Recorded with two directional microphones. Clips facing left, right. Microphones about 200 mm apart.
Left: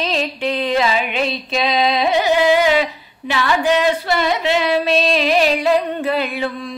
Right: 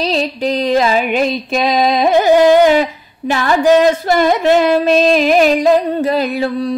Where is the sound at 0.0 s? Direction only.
40° right (ahead or behind).